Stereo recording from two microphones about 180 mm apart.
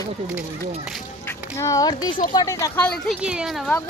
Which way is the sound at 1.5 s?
15° left (ahead or behind).